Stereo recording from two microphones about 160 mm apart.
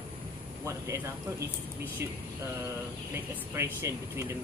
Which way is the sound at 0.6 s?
20° right (ahead or behind).